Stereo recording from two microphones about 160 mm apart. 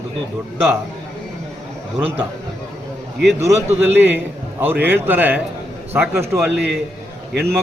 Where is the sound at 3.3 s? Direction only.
15° right (ahead or behind).